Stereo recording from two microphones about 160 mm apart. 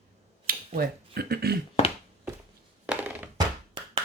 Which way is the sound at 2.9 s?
10° right (ahead or behind).